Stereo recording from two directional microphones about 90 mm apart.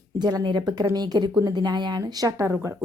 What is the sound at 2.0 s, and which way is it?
Speech, 40° right (ahead or behind).